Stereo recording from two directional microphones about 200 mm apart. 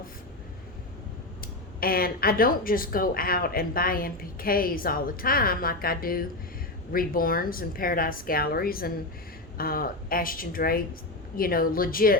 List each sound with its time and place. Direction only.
1.4 s speech: 45° left (ahead or behind)